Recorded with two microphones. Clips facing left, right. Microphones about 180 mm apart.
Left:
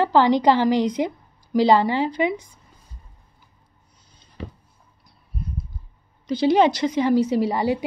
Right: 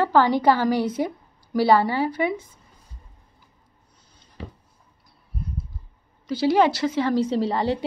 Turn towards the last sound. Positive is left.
turn(degrees=10)  # may be behind; listen again after turning